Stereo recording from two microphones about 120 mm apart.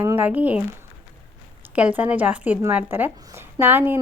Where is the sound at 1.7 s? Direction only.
10° right (ahead or behind).